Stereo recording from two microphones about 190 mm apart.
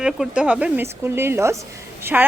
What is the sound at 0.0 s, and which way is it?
A woman's voice, 5° right (ahead or behind).